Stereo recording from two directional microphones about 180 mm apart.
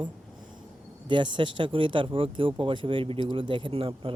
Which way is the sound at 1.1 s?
25° right (ahead or behind).